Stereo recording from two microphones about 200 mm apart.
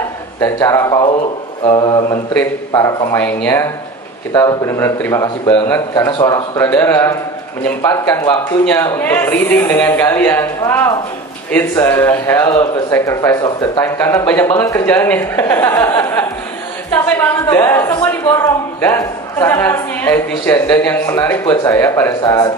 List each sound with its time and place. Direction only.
0.4 s a woman's voice: 15° left (ahead or behind)
1.6 s a sound: 25° left (ahead or behind)
2.7 s a woman's voice: 15° left (ahead or behind)